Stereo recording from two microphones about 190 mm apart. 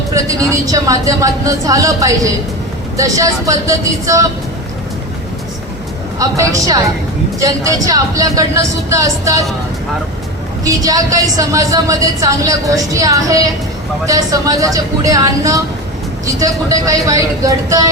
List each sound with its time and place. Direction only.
0.1 s speech: 15° right (ahead or behind)
6.1 s speech: 15° right (ahead or behind)
10.6 s speech: 15° right (ahead or behind)